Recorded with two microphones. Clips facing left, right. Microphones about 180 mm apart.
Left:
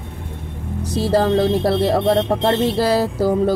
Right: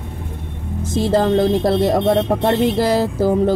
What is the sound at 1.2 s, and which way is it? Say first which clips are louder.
Speech: right 1 dB; 20° right (ahead or behind).